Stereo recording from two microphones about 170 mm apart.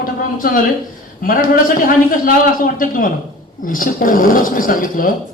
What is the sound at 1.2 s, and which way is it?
A man's voice, 55° left (ahead or behind).